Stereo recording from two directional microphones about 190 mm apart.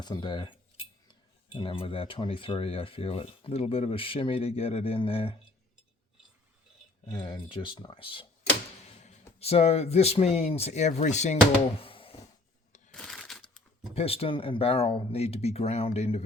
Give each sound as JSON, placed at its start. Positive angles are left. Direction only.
{"t": 0.0, "sound": "speech", "side_deg": 25}
{"t": 1.5, "sound": "speech", "side_deg": 30}
{"t": 7.1, "sound": "speech", "side_deg": 25}
{"t": 11.8, "sound": "a sound", "side_deg": 30}
{"t": 12.9, "sound": "crushing", "side_deg": 0}
{"t": 13.9, "sound": "speech", "side_deg": 30}